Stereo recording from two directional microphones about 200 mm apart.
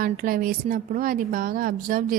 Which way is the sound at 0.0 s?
45° right (ahead or behind).